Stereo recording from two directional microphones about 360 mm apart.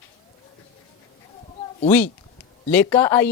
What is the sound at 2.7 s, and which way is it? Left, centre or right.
Speech, centre.